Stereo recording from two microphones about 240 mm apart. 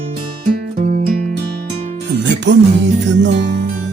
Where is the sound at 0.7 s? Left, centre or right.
Right.